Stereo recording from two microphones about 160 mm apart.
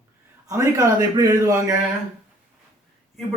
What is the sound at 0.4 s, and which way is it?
A man's voice, 20° right (ahead or behind).